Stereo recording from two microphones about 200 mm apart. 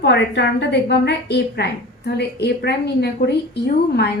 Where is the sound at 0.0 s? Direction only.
60° left (ahead or behind).